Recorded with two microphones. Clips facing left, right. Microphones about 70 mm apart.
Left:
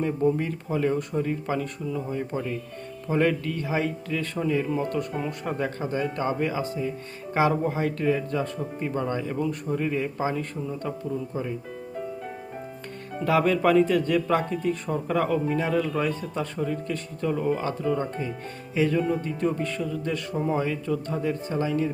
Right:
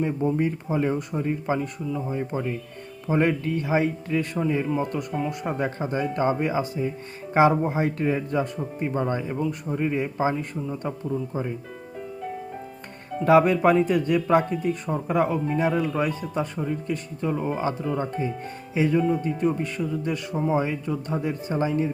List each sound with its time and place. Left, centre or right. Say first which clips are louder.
0.0 s speech: even; centre
1.6 s speech: right 1 dB; centre
2.1 s speech: right 1 dB; centre
4.7 s speech: right 1 dB; centre
5.5 s speech: left 1 dB; right
9.4 s speech: even; centre
9.7 s speech: right 3 dB; centre
13.2 s speech: right 4 dB; right